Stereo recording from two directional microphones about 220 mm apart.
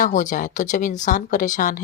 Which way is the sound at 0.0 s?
35° left (ahead or behind).